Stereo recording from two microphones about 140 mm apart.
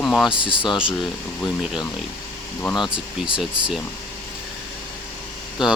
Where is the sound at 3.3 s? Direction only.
5° right (ahead or behind).